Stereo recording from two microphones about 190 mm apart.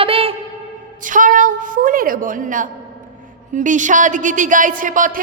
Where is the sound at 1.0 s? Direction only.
45° right (ahead or behind).